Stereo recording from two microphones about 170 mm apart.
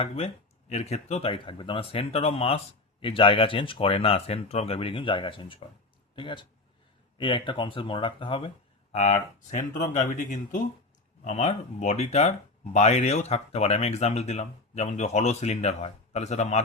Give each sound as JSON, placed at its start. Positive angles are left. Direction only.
{"t": 0.7, "sound": "speech", "side_deg": 40}